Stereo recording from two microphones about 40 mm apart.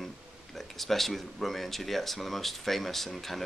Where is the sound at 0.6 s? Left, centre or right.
Centre.